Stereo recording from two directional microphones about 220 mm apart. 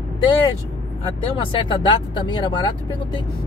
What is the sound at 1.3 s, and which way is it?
Speech, 20° left (ahead or behind).